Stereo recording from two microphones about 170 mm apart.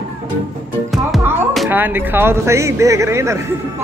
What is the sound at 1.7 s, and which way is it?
Speech, 10° right (ahead or behind).